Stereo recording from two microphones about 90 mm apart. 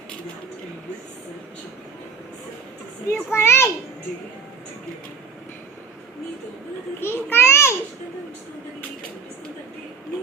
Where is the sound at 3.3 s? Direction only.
30° left (ahead or behind).